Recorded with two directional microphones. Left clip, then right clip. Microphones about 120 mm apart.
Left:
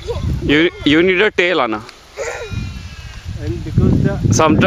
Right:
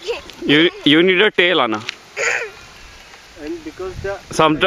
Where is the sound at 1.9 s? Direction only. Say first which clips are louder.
Right 5 dB; 40° right (ahead or behind).